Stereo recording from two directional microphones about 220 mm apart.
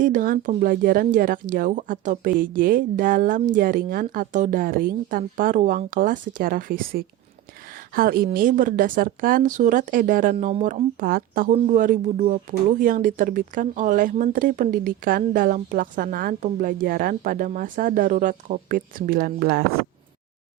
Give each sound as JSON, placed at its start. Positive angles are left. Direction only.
{"t": 0.0, "sound": "speech", "side_deg": -40}